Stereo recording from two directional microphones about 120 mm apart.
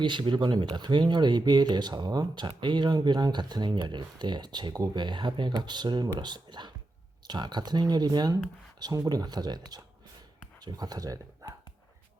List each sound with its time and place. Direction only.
0.0 s speech: 40° right (ahead or behind)